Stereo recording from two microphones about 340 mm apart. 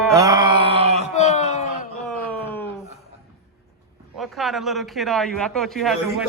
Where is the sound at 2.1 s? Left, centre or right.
Centre.